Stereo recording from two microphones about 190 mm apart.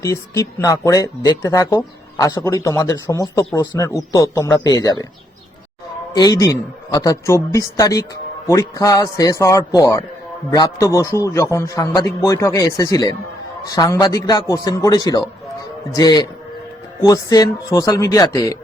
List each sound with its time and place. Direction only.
0.0 s speech: 15° left (ahead or behind)
6.1 s a man's voice: 20° left (ahead or behind)